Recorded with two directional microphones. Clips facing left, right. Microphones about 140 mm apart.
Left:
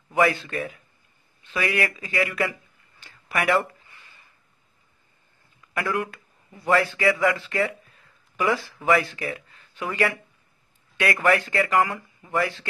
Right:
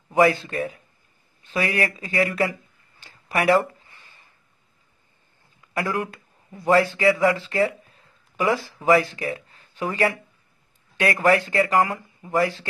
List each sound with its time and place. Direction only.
0.1 s speech: 35° right (ahead or behind)
3.0 s a sound: 35° right (ahead or behind)
5.7 s speech: 35° right (ahead or behind)